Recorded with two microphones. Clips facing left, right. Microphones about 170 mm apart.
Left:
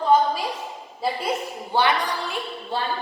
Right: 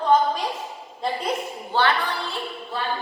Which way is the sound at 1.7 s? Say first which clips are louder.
Left 1 dB; 15° left (ahead or behind).